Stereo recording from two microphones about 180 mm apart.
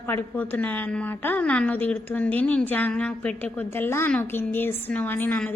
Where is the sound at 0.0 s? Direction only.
10° left (ahead or behind).